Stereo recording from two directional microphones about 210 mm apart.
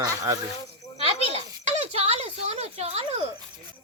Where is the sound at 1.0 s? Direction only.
30° right (ahead or behind).